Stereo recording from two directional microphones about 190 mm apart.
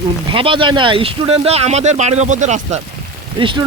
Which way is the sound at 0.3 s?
25° right (ahead or behind).